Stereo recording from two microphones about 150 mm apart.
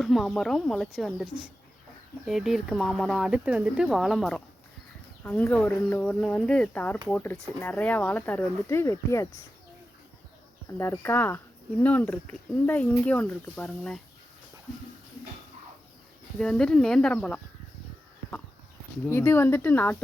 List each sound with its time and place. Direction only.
0.0 s speech: centre (ahead or behind)
5.2 s speech: 10° left (ahead or behind)
10.7 s speech: 15° left (ahead or behind)
16.4 s speech: 5° left (ahead or behind)
19.0 s speech: 15° left (ahead or behind)